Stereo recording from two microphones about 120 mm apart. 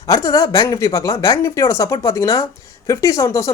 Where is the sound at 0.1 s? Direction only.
30° left (ahead or behind).